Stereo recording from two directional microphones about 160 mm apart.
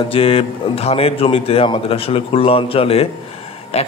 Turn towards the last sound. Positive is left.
turn(degrees=40)  # may be behind; listen again after turning